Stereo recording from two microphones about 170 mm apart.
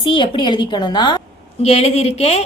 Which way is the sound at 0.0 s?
30° left (ahead or behind).